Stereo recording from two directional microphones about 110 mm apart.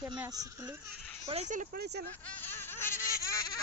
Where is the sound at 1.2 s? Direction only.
70° right (ahead or behind).